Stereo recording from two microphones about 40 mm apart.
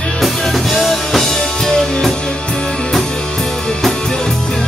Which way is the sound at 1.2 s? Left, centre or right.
Centre.